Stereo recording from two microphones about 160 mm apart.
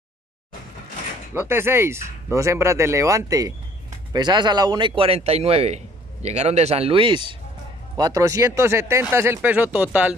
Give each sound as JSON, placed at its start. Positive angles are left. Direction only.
{"t": 1.3, "sound": "speech", "side_deg": -15}
{"t": 8.0, "sound": "speech", "side_deg": -20}